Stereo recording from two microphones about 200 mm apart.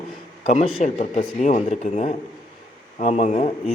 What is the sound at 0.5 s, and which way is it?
A man's voice, 35° left (ahead or behind).